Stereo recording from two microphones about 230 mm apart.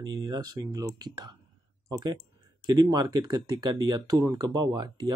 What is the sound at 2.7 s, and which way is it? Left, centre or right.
Speech, centre.